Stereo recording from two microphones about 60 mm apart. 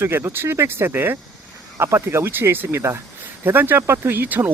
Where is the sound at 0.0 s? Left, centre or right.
Right.